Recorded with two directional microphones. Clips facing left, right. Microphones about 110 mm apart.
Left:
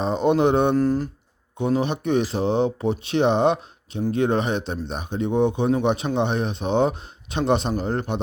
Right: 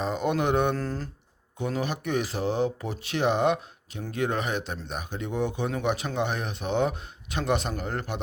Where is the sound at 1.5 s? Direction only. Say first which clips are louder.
Left 7 dB; 20° left (ahead or behind).